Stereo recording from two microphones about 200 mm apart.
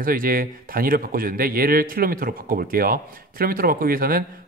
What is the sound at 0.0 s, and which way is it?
Speech, 45° right (ahead or behind).